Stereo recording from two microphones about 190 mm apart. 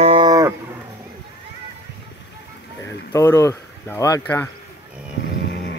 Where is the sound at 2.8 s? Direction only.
15° left (ahead or behind).